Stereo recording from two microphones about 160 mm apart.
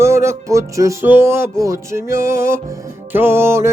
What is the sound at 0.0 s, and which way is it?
Music, 15° right (ahead or behind).